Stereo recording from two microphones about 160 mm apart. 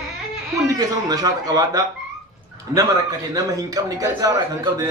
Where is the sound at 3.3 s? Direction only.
20° right (ahead or behind).